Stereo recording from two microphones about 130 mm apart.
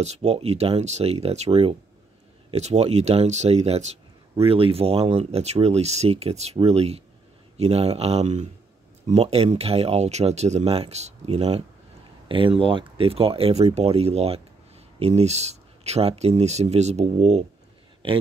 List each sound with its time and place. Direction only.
0.0 s speech: 55° right (ahead or behind)
12.3 s speech: 45° right (ahead or behind)